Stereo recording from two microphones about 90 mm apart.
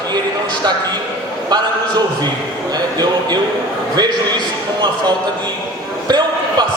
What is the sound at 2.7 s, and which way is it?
Speech, 50° right (ahead or behind).